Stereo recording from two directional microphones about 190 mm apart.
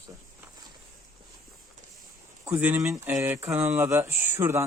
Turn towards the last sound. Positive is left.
turn(degrees=-10)  # may be behind; listen again after turning